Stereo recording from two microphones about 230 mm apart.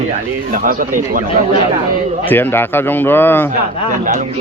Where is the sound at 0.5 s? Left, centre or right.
Right.